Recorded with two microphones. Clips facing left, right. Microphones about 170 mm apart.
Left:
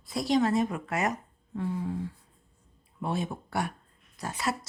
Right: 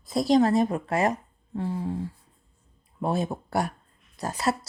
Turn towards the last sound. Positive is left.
turn(degrees=-40)  # may be behind; listen again after turning